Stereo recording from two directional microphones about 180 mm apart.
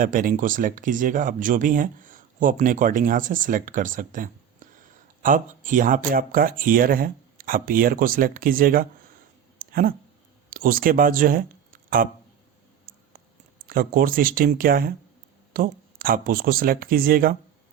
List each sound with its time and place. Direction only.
0.0 s speech: 50° right (ahead or behind)
9.6 s a sound: 50° right (ahead or behind)
10.5 s speech: 50° right (ahead or behind)
13.7 s speech: 50° right (ahead or behind)